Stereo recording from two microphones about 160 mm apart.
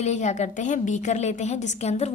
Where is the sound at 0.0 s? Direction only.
45° left (ahead or behind).